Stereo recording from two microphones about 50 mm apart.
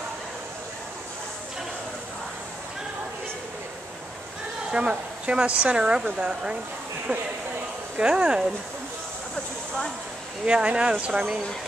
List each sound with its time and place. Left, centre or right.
4.6 s speech: right
8.0 s speech: centre
10.4 s speech: right